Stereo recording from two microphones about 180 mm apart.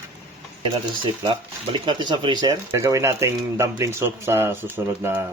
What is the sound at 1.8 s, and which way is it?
Speech, 25° right (ahead or behind).